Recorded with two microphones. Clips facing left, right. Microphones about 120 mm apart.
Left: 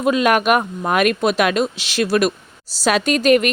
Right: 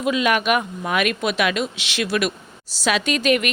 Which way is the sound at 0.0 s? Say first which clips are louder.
Left 4 dB; 45° left (ahead or behind).